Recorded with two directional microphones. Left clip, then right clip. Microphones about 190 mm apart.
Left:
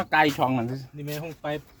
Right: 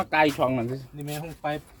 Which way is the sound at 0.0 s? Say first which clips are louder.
Even; 60° left (ahead or behind).